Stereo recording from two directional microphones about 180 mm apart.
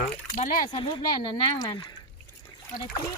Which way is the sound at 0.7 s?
25° left (ahead or behind).